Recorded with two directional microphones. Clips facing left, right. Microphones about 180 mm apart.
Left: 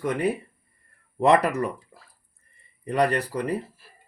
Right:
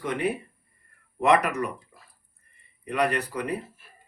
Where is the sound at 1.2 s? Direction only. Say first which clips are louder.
Left 2 dB; 30° left (ahead or behind).